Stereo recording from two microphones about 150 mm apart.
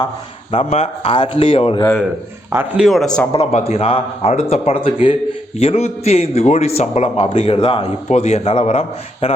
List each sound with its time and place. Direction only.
0.5 s speech: 45° left (ahead or behind)
2.5 s a man's voice: 15° right (ahead or behind)
2.8 s speech: centre (ahead or behind)
3.3 s a man's voice: 45° left (ahead or behind)